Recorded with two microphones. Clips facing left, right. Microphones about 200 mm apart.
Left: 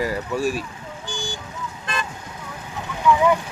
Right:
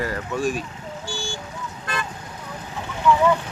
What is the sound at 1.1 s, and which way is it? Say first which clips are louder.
Vehicle: left 1 dB; 15° left (ahead or behind).